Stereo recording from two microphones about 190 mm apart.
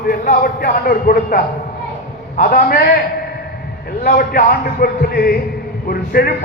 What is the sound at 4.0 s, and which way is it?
A man's voice, 50° left (ahead or behind).